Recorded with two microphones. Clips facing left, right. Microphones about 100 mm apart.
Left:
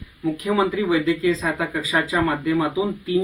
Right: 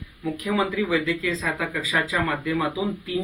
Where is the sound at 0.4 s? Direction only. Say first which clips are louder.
Left 3 dB; 25° left (ahead or behind).